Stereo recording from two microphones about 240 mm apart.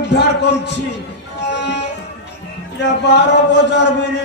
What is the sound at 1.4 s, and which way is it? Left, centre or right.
Music, left.